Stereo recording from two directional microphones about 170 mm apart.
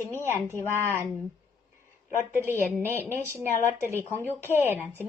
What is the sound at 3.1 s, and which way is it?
Speech, 15° right (ahead or behind).